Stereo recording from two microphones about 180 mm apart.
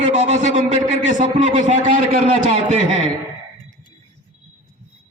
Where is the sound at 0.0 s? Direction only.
40° right (ahead or behind).